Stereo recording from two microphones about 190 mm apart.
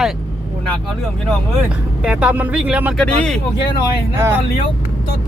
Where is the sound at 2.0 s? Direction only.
5° right (ahead or behind).